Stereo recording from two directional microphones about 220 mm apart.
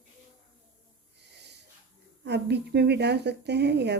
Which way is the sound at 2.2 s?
50° right (ahead or behind).